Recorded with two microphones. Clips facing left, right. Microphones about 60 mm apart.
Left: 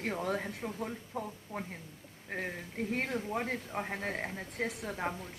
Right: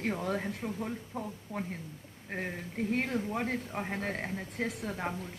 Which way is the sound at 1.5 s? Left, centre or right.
Left.